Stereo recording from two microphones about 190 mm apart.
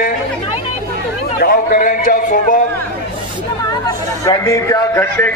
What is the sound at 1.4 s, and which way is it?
Speech, 50° left (ahead or behind).